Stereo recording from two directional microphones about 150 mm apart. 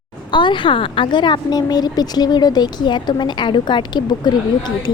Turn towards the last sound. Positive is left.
turn(degrees=30)  # may be behind; listen again after turning